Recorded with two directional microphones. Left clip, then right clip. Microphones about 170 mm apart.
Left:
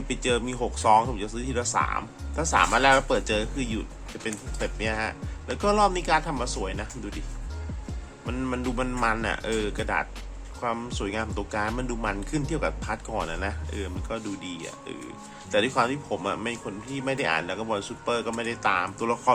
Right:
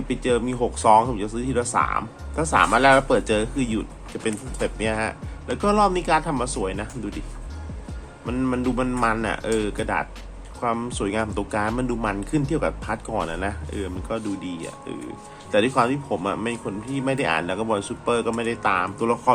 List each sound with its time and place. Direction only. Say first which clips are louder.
0.1 s speech: right 4 dB; 5° left (ahead or behind)
8.3 s speech: right 6 dB; centre (ahead or behind)